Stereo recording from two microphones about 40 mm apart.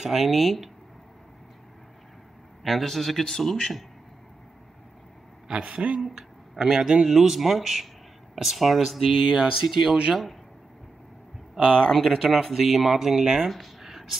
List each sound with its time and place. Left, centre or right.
0.0 s speech: centre
2.6 s speech: centre
5.5 s a man's voice: right
5.9 s speech: centre
9.3 s speech: centre
11.6 s speech: centre
13.4 s a sound: centre